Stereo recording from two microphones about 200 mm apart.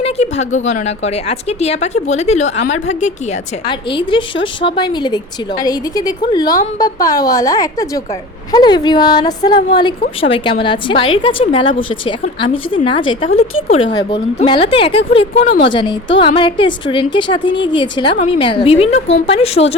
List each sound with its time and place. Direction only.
0.0 s a woman's voice: 35° left (ahead or behind)
3.7 s speech: 25° left (ahead or behind)
15.4 s a woman's voice: 45° left (ahead or behind)
15.7 s speech: 25° left (ahead or behind)